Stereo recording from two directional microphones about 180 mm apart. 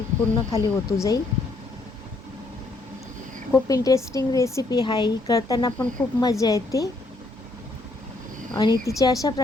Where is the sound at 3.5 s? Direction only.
20° left (ahead or behind).